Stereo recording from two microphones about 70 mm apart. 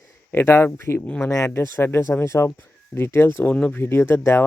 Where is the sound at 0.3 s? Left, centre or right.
Left.